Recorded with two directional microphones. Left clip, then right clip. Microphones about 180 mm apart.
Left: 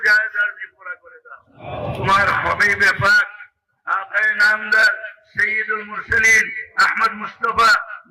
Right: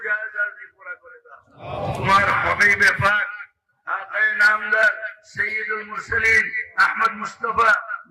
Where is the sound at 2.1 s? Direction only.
25° right (ahead or behind).